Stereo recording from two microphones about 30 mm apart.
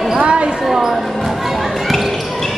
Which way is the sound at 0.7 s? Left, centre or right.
Centre.